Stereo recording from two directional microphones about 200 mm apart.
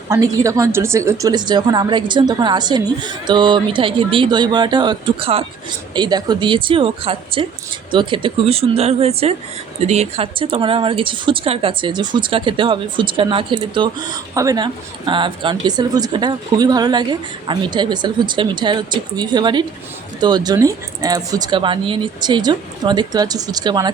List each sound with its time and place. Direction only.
0.1 s a woman's voice: 15° right (ahead or behind)